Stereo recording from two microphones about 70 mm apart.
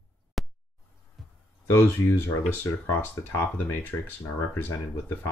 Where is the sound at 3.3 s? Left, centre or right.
Left.